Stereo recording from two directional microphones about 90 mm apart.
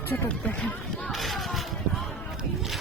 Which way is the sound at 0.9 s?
5° left (ahead or behind).